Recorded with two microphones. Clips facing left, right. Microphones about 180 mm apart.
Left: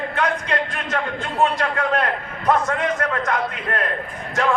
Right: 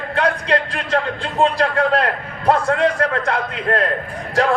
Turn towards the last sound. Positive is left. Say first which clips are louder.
# right 3 dB
turn(degrees=-35)  # may be behind; listen again after turning